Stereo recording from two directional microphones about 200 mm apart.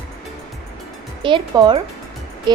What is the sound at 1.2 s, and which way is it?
Speech, 25° right (ahead or behind).